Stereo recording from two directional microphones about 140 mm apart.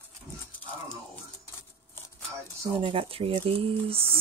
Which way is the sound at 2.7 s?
40° right (ahead or behind).